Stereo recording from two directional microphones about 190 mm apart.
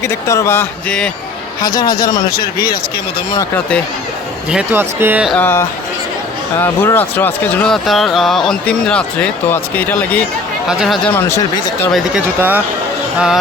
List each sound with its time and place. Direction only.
0.0 s speech: 15° left (ahead or behind)
1.6 s speech: 20° left (ahead or behind)
3.3 s speech: 10° left (ahead or behind)
4.4 s speech: 10° right (ahead or behind)
5.3 s speech: 10° left (ahead or behind)